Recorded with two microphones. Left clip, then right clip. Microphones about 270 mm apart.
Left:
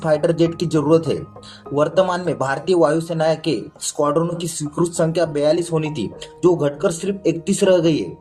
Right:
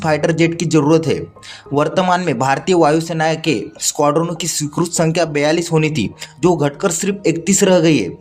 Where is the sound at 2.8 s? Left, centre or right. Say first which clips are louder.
Right 1 dB; right.